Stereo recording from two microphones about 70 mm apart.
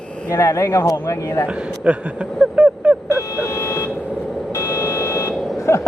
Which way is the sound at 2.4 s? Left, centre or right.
Centre.